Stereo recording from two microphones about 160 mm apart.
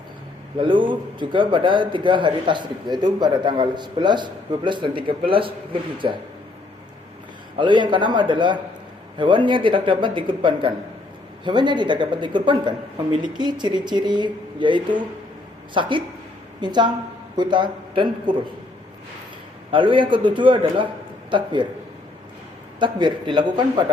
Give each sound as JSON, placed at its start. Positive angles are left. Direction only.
{"t": 0.6, "sound": "a man's voice", "side_deg": -30}
{"t": 7.6, "sound": "a man's voice", "side_deg": -30}
{"t": 19.7, "sound": "a man's voice", "side_deg": -30}
{"t": 22.8, "sound": "a man's voice", "side_deg": -30}